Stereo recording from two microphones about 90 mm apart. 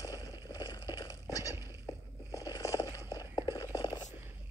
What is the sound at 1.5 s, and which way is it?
Cat, 30° right (ahead or behind).